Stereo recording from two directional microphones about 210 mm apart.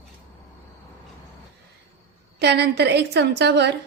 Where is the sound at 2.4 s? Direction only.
50° right (ahead or behind).